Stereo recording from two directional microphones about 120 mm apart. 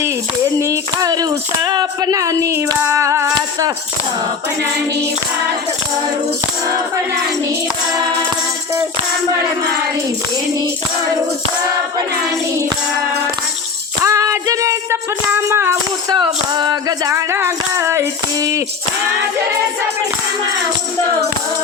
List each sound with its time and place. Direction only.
0.6 s music: 25° right (ahead or behind)
14.0 s music: 25° right (ahead or behind)
16.1 s speech: 40° right (ahead or behind)